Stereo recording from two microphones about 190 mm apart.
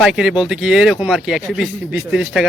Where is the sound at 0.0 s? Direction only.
5° right (ahead or behind).